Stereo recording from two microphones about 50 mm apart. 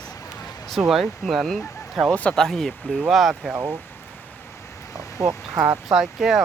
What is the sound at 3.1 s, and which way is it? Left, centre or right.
Speech, centre.